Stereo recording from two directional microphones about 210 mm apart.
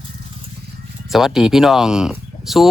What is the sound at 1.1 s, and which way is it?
Speech, centre (ahead or behind).